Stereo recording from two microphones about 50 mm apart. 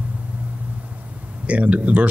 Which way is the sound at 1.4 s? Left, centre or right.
Right.